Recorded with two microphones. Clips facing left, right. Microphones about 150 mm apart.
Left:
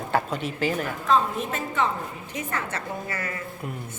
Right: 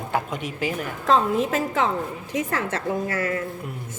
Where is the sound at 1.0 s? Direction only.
90° right.